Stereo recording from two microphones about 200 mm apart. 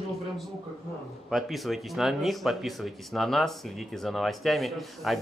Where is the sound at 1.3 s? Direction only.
Centre (ahead or behind).